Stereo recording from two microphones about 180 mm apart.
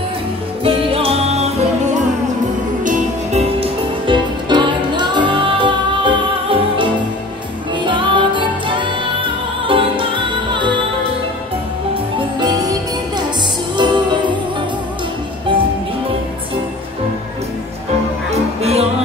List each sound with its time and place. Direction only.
0.7 s music: 30° right (ahead or behind)
2.8 s music: 40° right (ahead or behind)
12.4 s music: 20° right (ahead or behind)
13.7 s music: 25° right (ahead or behind)
18.3 s music: 35° right (ahead or behind)